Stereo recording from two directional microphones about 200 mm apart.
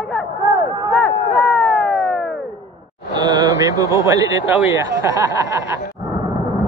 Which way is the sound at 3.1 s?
20° right (ahead or behind).